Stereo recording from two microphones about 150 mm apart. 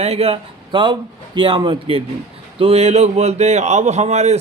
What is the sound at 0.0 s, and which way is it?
A man's voice, 45° right (ahead or behind).